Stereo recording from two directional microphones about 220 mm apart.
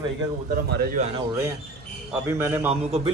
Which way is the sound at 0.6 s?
45° right (ahead or behind).